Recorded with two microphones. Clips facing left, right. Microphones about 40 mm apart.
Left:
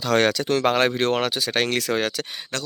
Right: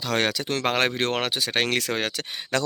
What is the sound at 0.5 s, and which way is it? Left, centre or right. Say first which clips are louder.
Speech: left 2 dB; right.